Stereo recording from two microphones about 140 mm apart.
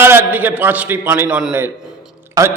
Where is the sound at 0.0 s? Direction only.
15° right (ahead or behind).